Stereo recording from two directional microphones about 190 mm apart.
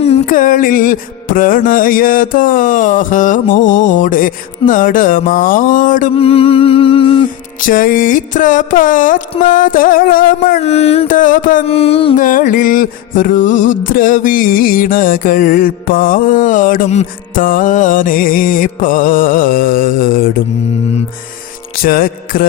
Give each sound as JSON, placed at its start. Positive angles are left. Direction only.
{"t": 0.0, "sound": "music", "side_deg": 40}
{"t": 6.1, "sound": "humming", "side_deg": 30}
{"t": 7.6, "sound": "music", "side_deg": 45}
{"t": 10.6, "sound": "music", "side_deg": 35}
{"t": 11.7, "sound": "music", "side_deg": 30}
{"t": 12.1, "sound": "music", "side_deg": 45}
{"t": 21.8, "sound": "music", "side_deg": 50}